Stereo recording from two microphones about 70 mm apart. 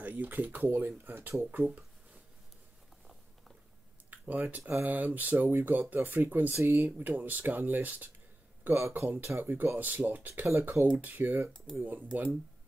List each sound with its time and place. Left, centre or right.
0.0 s speech: right
4.1 s speech: right
8.7 s speech: right
9.4 s speech: right